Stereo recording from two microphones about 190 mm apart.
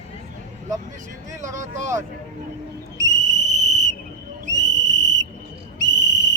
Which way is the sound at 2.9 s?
40° right (ahead or behind).